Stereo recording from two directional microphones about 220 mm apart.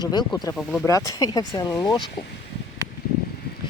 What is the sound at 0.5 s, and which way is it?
Speech, 5° left (ahead or behind).